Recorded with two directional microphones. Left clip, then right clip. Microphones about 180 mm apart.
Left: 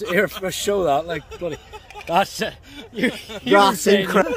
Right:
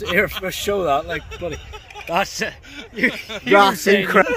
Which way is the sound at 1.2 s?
45° left (ahead or behind).